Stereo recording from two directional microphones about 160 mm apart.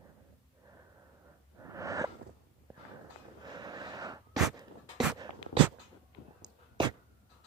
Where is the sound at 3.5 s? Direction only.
25° right (ahead or behind).